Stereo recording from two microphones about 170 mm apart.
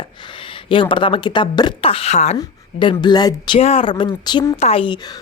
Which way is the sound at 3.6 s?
35° left (ahead or behind).